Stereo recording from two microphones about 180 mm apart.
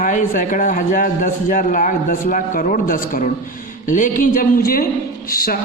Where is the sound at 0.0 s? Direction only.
45° left (ahead or behind).